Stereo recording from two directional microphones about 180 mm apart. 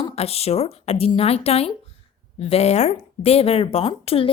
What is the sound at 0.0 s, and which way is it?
A woman's voice, 35° left (ahead or behind).